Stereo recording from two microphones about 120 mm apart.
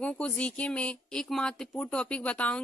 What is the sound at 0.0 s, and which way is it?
Speech, 10° left (ahead or behind).